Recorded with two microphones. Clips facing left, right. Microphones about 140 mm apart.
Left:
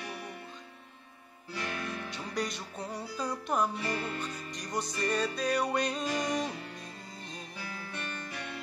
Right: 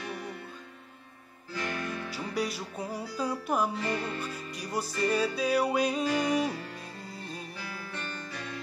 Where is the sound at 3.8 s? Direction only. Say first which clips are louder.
Right 2 dB; 30° right (ahead or behind).